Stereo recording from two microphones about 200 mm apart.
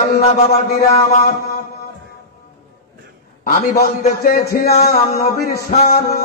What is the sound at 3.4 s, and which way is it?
A man's voice, 50° left (ahead or behind).